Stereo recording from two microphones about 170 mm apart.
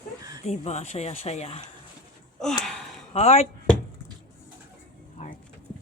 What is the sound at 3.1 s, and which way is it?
Speech, 40° left (ahead or behind).